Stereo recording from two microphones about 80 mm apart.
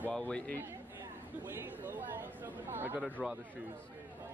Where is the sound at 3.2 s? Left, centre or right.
Centre.